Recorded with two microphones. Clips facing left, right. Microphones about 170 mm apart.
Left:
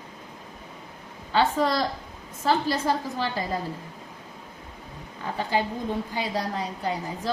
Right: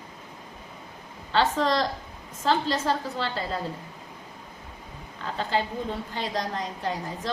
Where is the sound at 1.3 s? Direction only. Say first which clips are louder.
Left 1 dB; 10° left (ahead or behind).